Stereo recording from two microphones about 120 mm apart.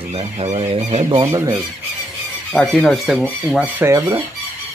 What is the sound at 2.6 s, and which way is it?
Speech, centre (ahead or behind).